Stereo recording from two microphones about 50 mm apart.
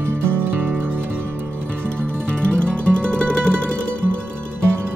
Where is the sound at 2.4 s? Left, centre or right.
Left.